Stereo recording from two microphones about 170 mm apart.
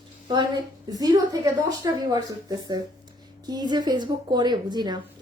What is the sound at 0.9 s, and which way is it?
A woman's voice, 20° right (ahead or behind).